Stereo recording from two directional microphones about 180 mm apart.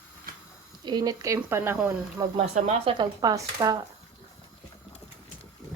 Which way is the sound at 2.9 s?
20° right (ahead or behind).